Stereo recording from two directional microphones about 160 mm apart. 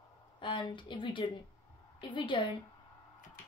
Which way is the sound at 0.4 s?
30° left (ahead or behind).